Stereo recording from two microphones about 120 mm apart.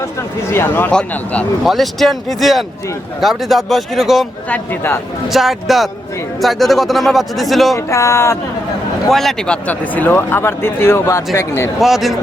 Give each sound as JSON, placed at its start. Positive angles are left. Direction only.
{"t": 0.2, "sound": "speech", "side_deg": 20}
{"t": 0.9, "sound": "speech", "side_deg": 10}
{"t": 1.6, "sound": "a man's voice", "side_deg": 0}
{"t": 4.4, "sound": "speech", "side_deg": 15}
{"t": 5.3, "sound": "a man's voice", "side_deg": 0}
{"t": 7.8, "sound": "speech", "side_deg": 25}
{"t": 9.0, "sound": "speech", "side_deg": 0}
{"t": 11.8, "sound": "a man's voice", "side_deg": 0}